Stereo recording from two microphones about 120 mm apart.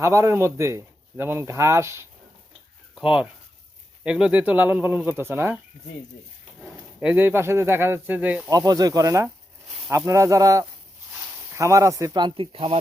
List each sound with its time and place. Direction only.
0.0 s speech: 25° right (ahead or behind)
2.9 s speech: 5° right (ahead or behind)
6.6 s speech: 10° right (ahead or behind)
8.4 s speech: 30° right (ahead or behind)
12.5 s speech: 55° right (ahead or behind)